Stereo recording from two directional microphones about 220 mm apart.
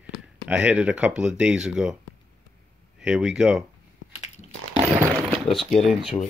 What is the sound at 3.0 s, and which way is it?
Speech, 5° right (ahead or behind).